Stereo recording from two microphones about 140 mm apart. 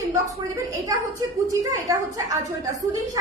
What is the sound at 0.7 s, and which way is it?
A woman's voice, 25° right (ahead or behind).